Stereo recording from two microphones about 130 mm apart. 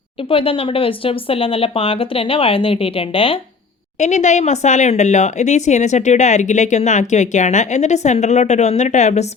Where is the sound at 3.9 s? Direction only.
65° left (ahead or behind).